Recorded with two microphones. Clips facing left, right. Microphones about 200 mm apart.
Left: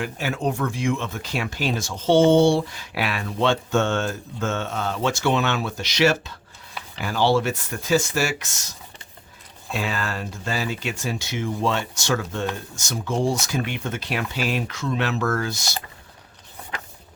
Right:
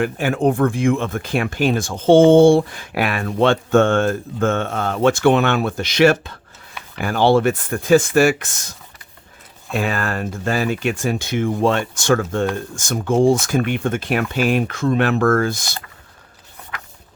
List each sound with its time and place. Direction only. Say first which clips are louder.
0.0 s speech: right 8 dB; 55° right (ahead or behind)
9.7 s speech: right 6 dB; 55° right (ahead or behind)